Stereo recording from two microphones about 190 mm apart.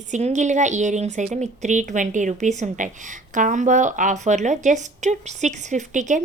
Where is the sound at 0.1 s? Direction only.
40° right (ahead or behind).